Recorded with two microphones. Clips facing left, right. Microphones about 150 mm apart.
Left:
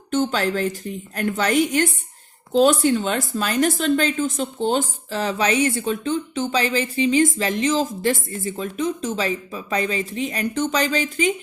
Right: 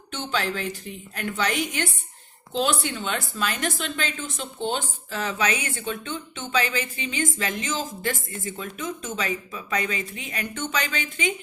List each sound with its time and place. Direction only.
0.1 s a woman's voice: 45° left (ahead or behind)